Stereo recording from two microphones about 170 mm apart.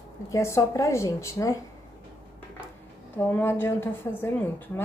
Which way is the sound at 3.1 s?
15° left (ahead or behind).